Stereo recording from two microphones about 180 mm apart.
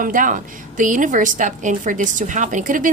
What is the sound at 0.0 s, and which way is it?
A woman's voice, 45° right (ahead or behind).